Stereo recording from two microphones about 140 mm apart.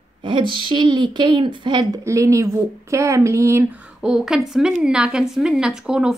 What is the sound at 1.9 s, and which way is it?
Speech, 20° right (ahead or behind).